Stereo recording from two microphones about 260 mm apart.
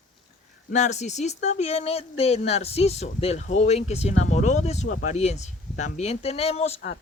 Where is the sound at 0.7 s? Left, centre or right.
Left.